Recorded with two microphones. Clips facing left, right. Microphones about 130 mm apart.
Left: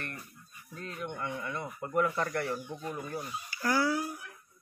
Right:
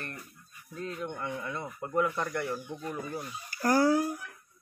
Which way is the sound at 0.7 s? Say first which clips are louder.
Right 3 dB; 25° right (ahead or behind).